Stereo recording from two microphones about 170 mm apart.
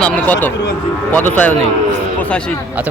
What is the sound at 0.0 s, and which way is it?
Speech, 10° left (ahead or behind).